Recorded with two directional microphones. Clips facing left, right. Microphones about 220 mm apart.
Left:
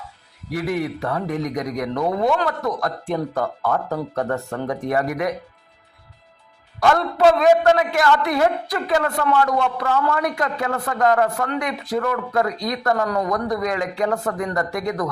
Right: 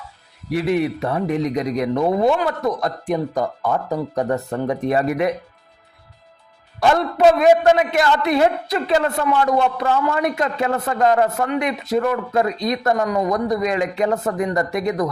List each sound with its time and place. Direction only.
0.5 s speech: 25° right (ahead or behind)
6.7 s speech: 20° right (ahead or behind)